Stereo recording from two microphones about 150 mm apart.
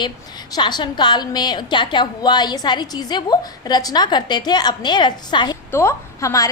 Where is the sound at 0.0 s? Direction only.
30° left (ahead or behind).